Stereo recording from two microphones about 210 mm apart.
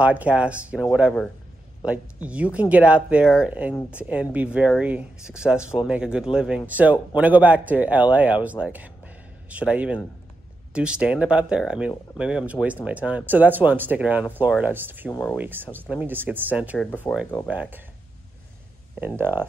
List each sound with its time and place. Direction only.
0.0 s speech: 5° right (ahead or behind)
8.6 s a sound: 5° right (ahead or behind)
10.7 s speech: 5° right (ahead or behind)
16.7 s speech: 5° left (ahead or behind)
17.5 s speech: 10° right (ahead or behind)
18.9 s speech: 10° right (ahead or behind)